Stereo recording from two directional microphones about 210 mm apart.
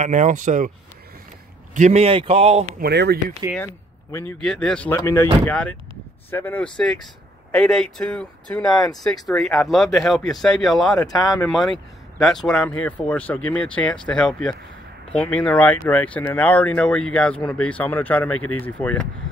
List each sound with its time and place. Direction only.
0.0 s speech: 35° right (ahead or behind)
1.7 s a man's voice: 35° right (ahead or behind)
2.8 s speech: 50° right (ahead or behind)
3.5 s speech: 10° left (ahead or behind)
11.0 s speech: 15° left (ahead or behind)
11.4 s speech: centre (ahead or behind)